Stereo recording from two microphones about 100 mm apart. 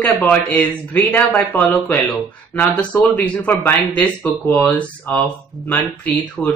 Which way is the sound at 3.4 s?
15° left (ahead or behind).